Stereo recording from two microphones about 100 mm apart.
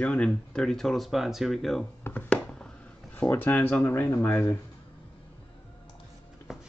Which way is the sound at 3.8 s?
20° left (ahead or behind).